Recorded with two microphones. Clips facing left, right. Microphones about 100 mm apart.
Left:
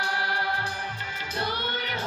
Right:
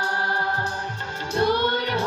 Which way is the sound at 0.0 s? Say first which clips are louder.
Right 3 dB; 45° right (ahead or behind).